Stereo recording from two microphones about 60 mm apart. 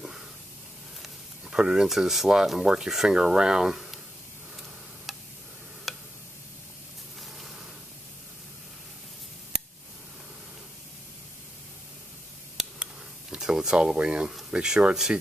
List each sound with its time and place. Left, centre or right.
1.0 s speech: centre
5.9 s tick: centre
12.7 s a sound: centre
14.5 s speech: centre